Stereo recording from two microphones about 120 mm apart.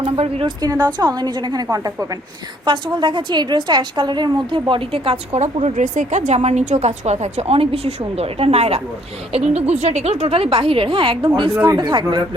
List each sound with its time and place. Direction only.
0.0 s speech: 55° right (ahead or behind)
0.4 s a woman's voice: 35° right (ahead or behind)
2.6 s a woman's voice: 40° right (ahead or behind)
11.5 s a woman's voice: 25° right (ahead or behind)
11.8 s a woman's voice: 40° right (ahead or behind)